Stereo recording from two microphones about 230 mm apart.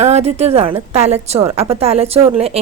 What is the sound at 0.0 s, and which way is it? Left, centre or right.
A woman's voice, right.